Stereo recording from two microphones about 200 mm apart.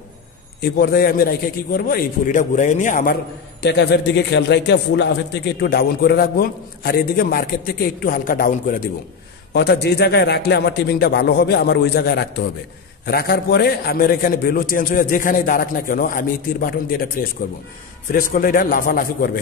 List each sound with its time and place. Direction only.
0.6 s a man's voice: 50° left (ahead or behind)
3.6 s a man's voice: 60° left (ahead or behind)
9.5 s a man's voice: 55° left (ahead or behind)